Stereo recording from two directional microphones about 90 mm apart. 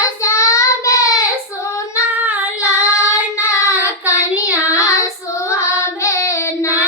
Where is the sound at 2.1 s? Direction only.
15° right (ahead or behind).